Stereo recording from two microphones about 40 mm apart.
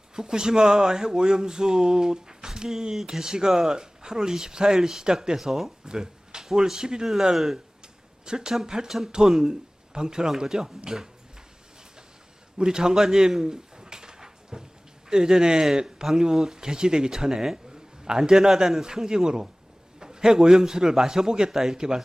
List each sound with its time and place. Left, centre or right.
0.2 s speech: centre
5.4 s speech: centre
5.9 s speech: centre
12.5 s pigeon: centre
15.1 s speech: centre